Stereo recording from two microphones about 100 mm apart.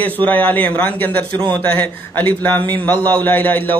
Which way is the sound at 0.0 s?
15° left (ahead or behind).